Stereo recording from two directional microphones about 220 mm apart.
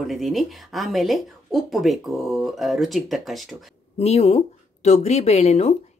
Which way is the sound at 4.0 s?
30° left (ahead or behind).